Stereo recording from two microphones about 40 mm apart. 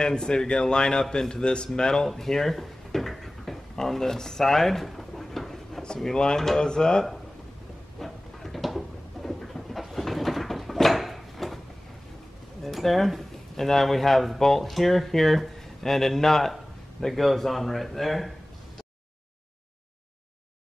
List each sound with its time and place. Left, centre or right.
0.0 s speech: centre
3.7 s drawer open or close: centre
6.1 s speech: centre
8.0 s a sound: centre
12.6 s speech: centre